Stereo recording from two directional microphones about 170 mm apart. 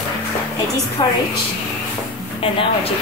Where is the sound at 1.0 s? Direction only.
30° left (ahead or behind).